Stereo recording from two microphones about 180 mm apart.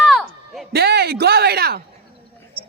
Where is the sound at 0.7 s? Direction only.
60° right (ahead or behind).